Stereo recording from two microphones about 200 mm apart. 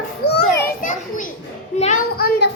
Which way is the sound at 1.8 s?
45° left (ahead or behind).